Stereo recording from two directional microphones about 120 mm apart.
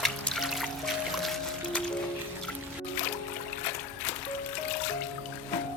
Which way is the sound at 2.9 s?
15° left (ahead or behind).